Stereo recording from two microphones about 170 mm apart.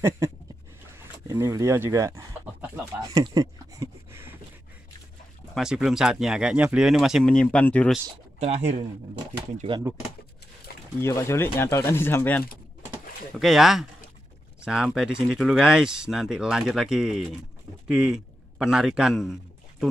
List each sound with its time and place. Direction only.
0.9 s speech: 15° right (ahead or behind)
3.3 s a sound: 20° right (ahead or behind)
5.5 s speech: 5° right (ahead or behind)
8.4 s speech: 40° right (ahead or behind)
9.9 s speech: 15° right (ahead or behind)
11.0 s speech: 15° left (ahead or behind)
13.4 s a man's voice: centre (ahead or behind)